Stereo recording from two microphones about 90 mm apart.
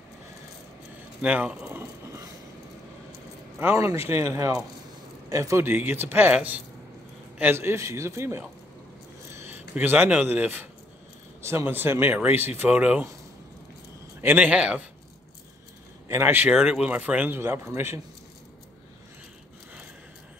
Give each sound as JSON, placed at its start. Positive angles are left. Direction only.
{"t": 1.2, "sound": "a man's voice", "side_deg": -15}
{"t": 1.7, "sound": "a sound", "side_deg": -30}
{"t": 3.7, "sound": "a man's voice", "side_deg": -35}
{"t": 5.6, "sound": "a man's voice", "side_deg": -25}
{"t": 14.2, "sound": "a man's voice", "side_deg": -20}
{"t": 16.1, "sound": "speech", "side_deg": -25}
{"t": 16.5, "sound": "speech", "side_deg": -5}